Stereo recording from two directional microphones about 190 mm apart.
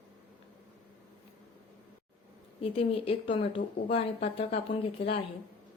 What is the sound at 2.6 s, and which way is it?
Speech, 30° left (ahead or behind).